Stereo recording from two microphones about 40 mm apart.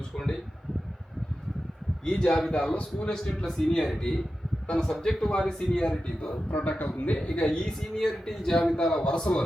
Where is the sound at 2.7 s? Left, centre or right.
Left.